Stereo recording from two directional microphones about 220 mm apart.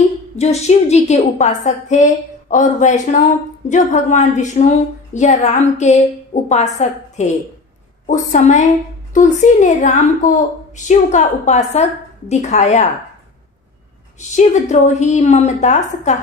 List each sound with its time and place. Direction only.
0.4 s a woman's voice: 30° left (ahead or behind)
14.3 s a woman's voice: 30° left (ahead or behind)